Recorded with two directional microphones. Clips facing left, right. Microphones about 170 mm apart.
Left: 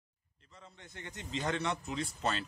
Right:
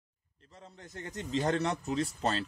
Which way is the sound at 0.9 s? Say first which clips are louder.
Right 7 dB; 35° right (ahead or behind).